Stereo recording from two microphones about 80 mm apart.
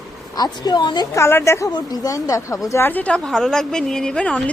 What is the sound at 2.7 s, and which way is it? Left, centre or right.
Speech, left.